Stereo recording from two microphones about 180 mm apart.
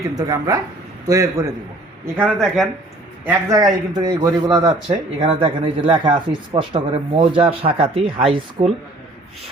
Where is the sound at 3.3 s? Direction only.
20° right (ahead or behind).